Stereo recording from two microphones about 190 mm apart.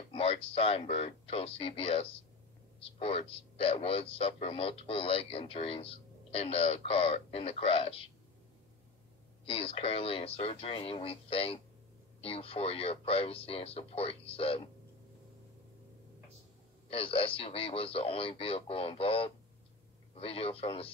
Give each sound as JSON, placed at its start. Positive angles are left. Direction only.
{"t": 0.1, "sound": "a man's voice", "side_deg": 30}
{"t": 9.5, "sound": "a man's voice", "side_deg": 30}
{"t": 16.9, "sound": "a man's voice", "side_deg": 30}